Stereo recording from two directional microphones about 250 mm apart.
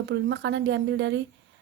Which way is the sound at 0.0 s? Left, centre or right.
Right.